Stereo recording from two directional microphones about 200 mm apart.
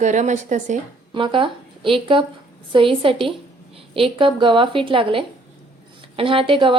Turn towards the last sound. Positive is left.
turn(degrees=-25)  # may be behind; listen again after turning